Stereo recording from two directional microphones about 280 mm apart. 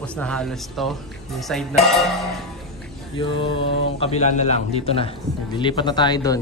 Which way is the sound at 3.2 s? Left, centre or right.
Centre.